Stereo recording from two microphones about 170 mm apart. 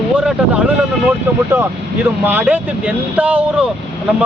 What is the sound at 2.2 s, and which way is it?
Speech, 10° right (ahead or behind).